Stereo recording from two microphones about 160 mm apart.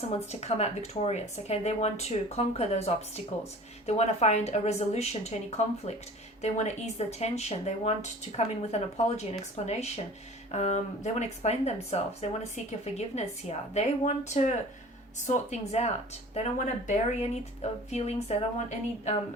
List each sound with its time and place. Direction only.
0.3 s speech: 40° left (ahead or behind)